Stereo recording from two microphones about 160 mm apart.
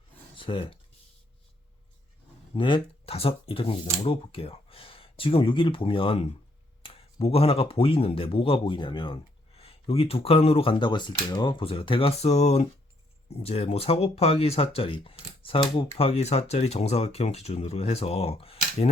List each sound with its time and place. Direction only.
0.3 s speech: 35° left (ahead or behind)
2.6 s speech: 30° left (ahead or behind)